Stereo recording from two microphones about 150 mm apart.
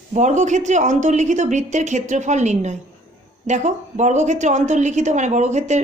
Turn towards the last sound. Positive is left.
turn(degrees=-50)  # may be behind; listen again after turning